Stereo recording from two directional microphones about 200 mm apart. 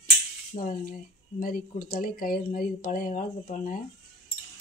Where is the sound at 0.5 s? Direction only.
45° left (ahead or behind).